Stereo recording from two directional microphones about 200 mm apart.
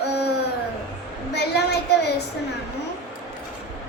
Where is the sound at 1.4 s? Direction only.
55° left (ahead or behind).